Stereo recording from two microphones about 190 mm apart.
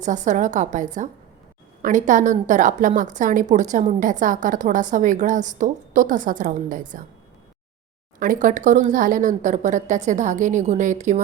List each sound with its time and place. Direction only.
0.0 s a woman's voice: 40° right (ahead or behind)
8.2 s speech: 45° right (ahead or behind)